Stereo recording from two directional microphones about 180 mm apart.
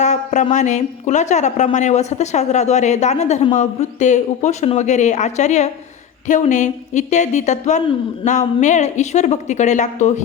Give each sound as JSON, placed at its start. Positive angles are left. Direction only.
{"t": 0.0, "sound": "a woman's voice", "side_deg": 40}